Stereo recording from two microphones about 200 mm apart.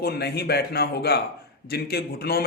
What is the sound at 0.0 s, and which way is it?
A man's voice, 55° left (ahead or behind).